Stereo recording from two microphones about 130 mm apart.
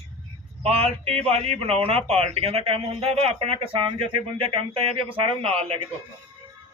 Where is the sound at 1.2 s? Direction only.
50° right (ahead or behind).